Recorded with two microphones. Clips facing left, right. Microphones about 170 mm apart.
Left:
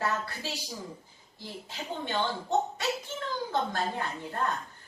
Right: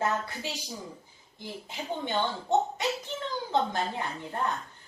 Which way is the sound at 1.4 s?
15° right (ahead or behind).